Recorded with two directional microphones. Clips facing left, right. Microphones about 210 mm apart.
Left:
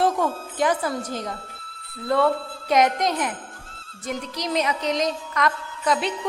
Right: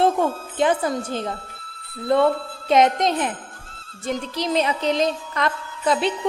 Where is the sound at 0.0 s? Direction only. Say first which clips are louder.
Right 3 dB; 25° right (ahead or behind).